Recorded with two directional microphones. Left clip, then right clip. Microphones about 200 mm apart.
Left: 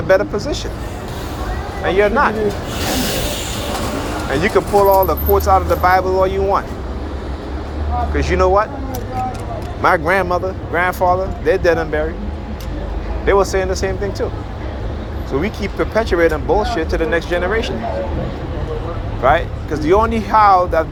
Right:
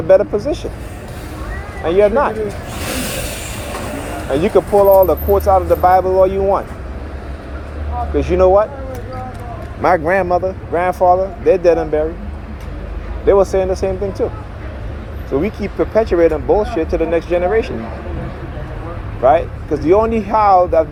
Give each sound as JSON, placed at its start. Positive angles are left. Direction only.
{"t": 0.1, "sound": "speech", "side_deg": -45}
{"t": 1.8, "sound": "speech", "side_deg": -45}
{"t": 4.3, "sound": "speech", "side_deg": -45}
{"t": 8.1, "sound": "speech", "side_deg": -45}
{"t": 9.8, "sound": "speech", "side_deg": -45}
{"t": 13.2, "sound": "speech", "side_deg": -50}
{"t": 15.3, "sound": "speech", "side_deg": -45}
{"t": 19.2, "sound": "speech", "side_deg": -45}